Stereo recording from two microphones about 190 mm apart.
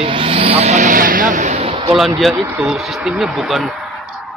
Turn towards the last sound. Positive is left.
turn(degrees=0)  # may be behind; listen again after turning